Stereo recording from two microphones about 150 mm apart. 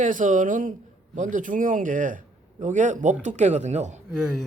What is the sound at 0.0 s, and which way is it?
Speech, 60° right (ahead or behind).